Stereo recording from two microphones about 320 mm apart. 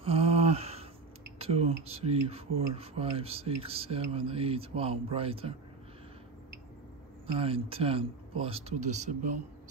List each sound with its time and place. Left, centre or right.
0.0 s a sound: centre
1.4 s speech: centre
7.3 s speech: centre